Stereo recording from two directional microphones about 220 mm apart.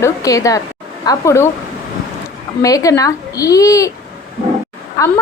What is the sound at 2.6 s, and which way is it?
A woman's voice, 15° left (ahead or behind).